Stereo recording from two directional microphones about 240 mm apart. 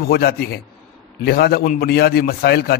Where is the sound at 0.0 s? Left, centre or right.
Left.